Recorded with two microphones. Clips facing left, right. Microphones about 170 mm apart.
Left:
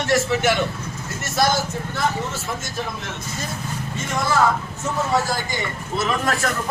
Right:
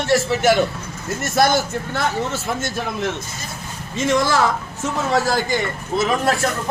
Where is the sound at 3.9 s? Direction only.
90° right.